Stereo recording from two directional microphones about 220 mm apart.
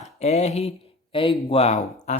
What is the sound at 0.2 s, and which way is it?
Speech, 30° left (ahead or behind).